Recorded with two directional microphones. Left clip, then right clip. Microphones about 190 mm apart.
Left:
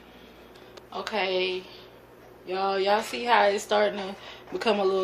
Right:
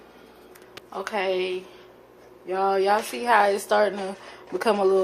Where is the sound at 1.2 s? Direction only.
70° right (ahead or behind).